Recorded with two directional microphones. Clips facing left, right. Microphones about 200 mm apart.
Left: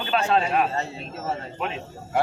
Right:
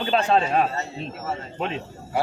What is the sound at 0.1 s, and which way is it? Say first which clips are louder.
Speech: right 1 dB; 30° right (ahead or behind).